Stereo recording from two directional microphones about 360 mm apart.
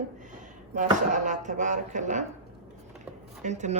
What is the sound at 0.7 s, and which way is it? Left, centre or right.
Speech, right.